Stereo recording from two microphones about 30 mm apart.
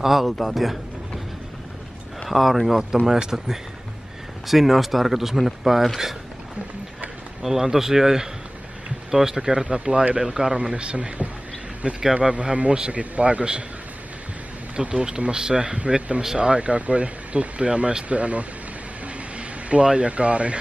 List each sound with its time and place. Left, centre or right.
0.0 s speech: centre
2.2 s speech: centre
3.1 s speech: centre
4.5 s speech: centre
7.4 s speech: centre
9.5 s a man's voice: right
10.6 s a man's voice: right
12.9 s speech: right
14.8 s a man's voice: right
19.3 s a sound: right
19.9 s speech: right